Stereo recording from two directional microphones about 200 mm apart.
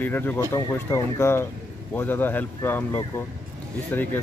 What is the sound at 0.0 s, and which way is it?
Speech, 10° left (ahead or behind).